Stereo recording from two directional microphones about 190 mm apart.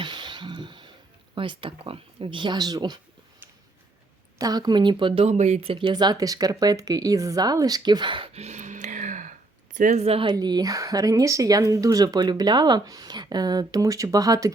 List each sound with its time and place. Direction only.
0.0 s music: 25° right (ahead or behind)
1.4 s speech: 25° right (ahead or behind)
4.4 s speech: 20° right (ahead or behind)